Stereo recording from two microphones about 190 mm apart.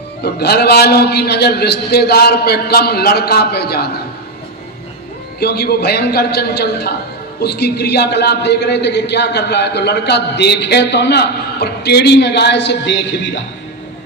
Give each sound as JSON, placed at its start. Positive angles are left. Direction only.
{"t": 0.2, "sound": "a man's voice", "side_deg": 60}
{"t": 5.4, "sound": "a man's voice", "side_deg": 60}